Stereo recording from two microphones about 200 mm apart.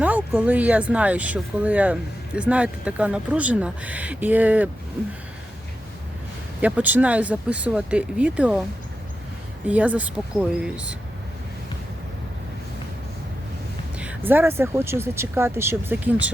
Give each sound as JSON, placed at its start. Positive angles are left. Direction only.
{"t": 0.0, "sound": "speech", "side_deg": -5}
{"t": 6.6, "sound": "speech", "side_deg": -5}
{"t": 9.6, "sound": "speech", "side_deg": -5}
{"t": 14.0, "sound": "speech", "side_deg": -10}